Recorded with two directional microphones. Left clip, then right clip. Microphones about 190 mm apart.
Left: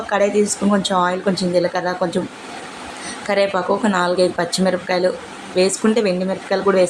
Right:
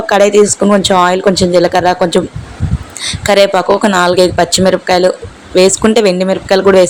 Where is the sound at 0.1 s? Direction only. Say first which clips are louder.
Right 10 dB; 45° right (ahead or behind).